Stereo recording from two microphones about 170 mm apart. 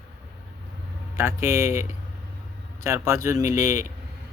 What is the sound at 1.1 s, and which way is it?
Speech, 15° right (ahead or behind).